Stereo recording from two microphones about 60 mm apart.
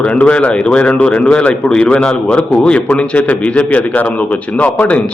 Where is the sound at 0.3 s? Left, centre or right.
Centre.